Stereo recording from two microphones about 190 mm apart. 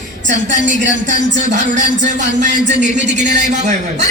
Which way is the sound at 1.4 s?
40° right (ahead or behind).